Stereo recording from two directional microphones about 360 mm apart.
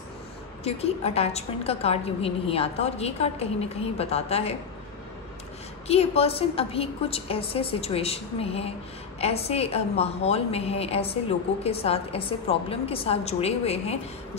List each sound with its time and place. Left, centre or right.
0.7 s a woman's voice: centre
5.9 s a woman's voice: centre